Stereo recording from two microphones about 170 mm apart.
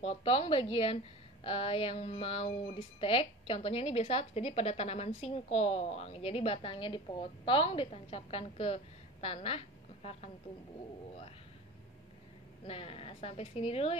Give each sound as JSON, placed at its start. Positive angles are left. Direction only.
{"t": 0.0, "sound": "speech", "side_deg": 35}
{"t": 12.6, "sound": "speech", "side_deg": 35}